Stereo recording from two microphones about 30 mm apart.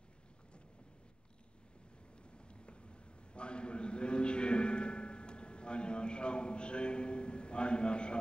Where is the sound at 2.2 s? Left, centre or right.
Left.